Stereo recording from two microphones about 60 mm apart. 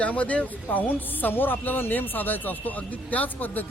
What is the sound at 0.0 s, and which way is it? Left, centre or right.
Speech, left.